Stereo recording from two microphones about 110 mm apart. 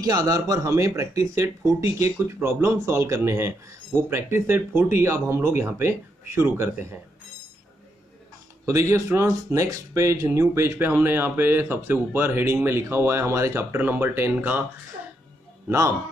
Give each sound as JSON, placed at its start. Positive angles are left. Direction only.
{"t": 0.0, "sound": "speech", "side_deg": -35}
{"t": 8.6, "sound": "speech", "side_deg": -25}